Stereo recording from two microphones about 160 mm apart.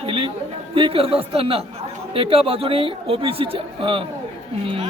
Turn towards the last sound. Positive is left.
turn(degrees=-35)  # may be behind; listen again after turning